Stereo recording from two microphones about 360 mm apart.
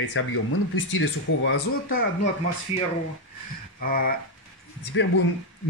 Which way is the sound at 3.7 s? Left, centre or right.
Left.